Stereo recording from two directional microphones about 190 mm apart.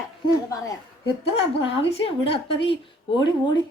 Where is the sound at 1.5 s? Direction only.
30° left (ahead or behind).